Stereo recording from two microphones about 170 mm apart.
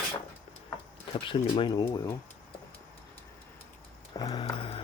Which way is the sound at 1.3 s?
30° left (ahead or behind).